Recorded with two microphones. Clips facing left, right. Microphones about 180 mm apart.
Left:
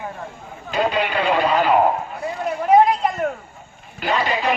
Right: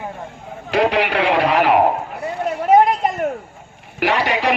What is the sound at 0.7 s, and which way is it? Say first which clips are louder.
A man's voice: right 4 dB; 75° right (ahead or behind).